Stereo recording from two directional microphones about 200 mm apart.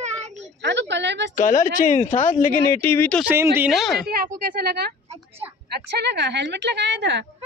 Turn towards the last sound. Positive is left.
turn(degrees=-60)  # may be behind; listen again after turning